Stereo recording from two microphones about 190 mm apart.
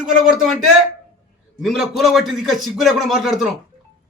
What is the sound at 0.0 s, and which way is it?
A man's voice, centre (ahead or behind).